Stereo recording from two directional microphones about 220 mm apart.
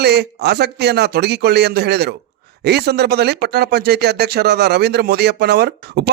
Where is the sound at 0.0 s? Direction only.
50° right (ahead or behind).